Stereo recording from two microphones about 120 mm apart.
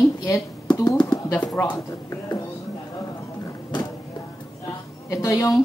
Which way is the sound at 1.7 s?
25° left (ahead or behind).